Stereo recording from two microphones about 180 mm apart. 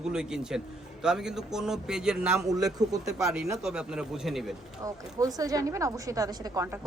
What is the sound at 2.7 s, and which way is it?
Speech, 20° right (ahead or behind).